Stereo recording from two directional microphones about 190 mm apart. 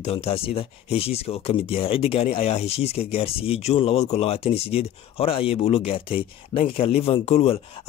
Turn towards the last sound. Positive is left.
turn(degrees=35)  # may be behind; listen again after turning